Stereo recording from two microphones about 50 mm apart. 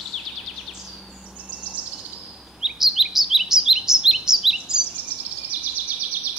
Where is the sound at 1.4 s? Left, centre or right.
Right.